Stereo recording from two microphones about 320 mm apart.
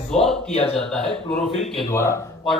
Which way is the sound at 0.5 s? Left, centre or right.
Centre.